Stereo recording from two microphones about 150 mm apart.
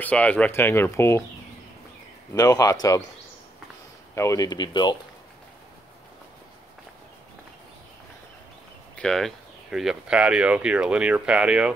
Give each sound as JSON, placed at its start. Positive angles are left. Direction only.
{"t": 0.0, "sound": "speech", "side_deg": 10}
{"t": 2.3, "sound": "speech", "side_deg": 25}
{"t": 4.1, "sound": "speech", "side_deg": 20}
{"t": 8.9, "sound": "speech", "side_deg": 5}